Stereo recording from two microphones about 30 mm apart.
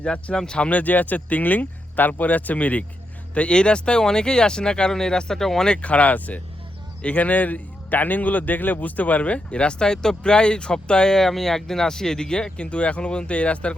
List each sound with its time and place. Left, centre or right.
0.0 s speech: left
0.3 s speech: left
0.7 s speech: left
3.3 s speech: left; by 5.6 s centre
5.8 s a man's voice: left
11.2 s speech: centre
12.5 s speech: left